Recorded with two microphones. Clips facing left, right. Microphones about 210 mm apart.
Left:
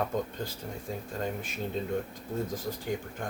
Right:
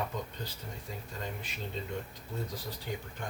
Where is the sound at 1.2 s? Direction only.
50° left (ahead or behind).